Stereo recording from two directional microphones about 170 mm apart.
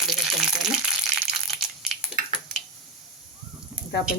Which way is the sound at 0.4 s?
5° right (ahead or behind).